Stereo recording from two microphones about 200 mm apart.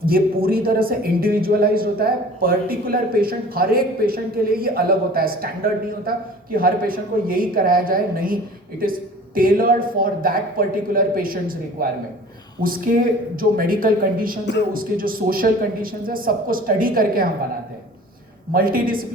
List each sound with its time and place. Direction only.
0.0 s a man's voice: 50° right (ahead or behind)
18.5 s a man's voice: 45° right (ahead or behind)